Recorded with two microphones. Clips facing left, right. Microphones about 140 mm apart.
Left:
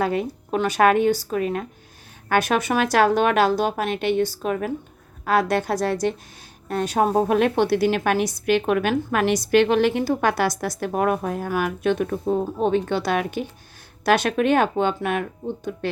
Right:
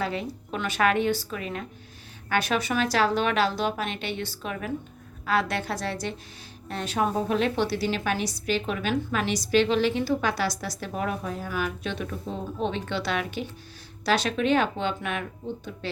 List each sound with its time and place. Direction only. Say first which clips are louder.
0.0 s a woman's voice: left 7 dB; 50° left (ahead or behind)
7.2 s a woman's voice: left 7 dB; 55° left (ahead or behind)